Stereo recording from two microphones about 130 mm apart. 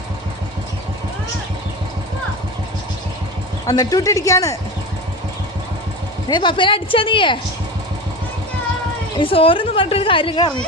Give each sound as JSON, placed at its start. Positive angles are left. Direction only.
{"t": 3.7, "sound": "speech", "side_deg": 30}
{"t": 6.2, "sound": "speech", "side_deg": 35}
{"t": 9.1, "sound": "a woman's voice", "side_deg": 45}